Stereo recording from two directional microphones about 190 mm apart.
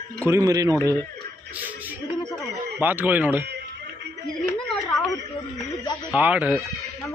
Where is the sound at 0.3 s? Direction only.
15° right (ahead or behind).